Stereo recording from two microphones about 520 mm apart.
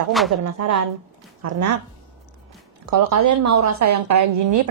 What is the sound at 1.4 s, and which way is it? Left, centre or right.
Speech, right.